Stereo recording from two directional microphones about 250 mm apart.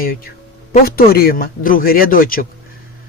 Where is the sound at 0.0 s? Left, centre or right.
Left.